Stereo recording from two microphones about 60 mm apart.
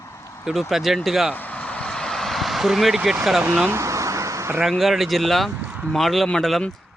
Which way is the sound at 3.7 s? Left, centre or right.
Right.